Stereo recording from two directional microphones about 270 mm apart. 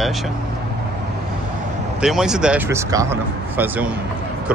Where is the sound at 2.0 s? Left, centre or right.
Centre.